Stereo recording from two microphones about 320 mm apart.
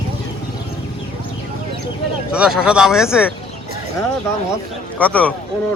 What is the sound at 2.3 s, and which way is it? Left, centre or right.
Speech, centre.